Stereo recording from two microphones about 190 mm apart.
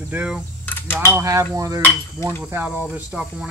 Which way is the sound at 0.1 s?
5° right (ahead or behind).